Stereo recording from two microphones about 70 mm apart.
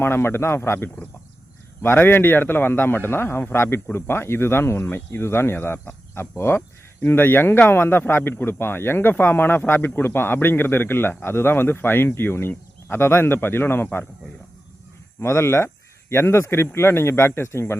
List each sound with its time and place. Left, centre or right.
0.0 s speech: left
15.2 s speech: left